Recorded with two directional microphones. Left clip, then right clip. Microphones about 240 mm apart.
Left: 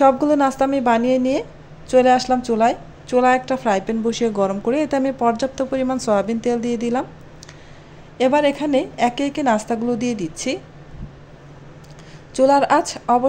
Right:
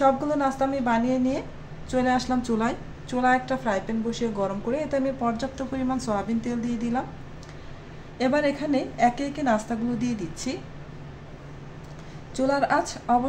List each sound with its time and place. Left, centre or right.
0.0 s a woman's voice: left
8.2 s a woman's voice: left
12.4 s a woman's voice: left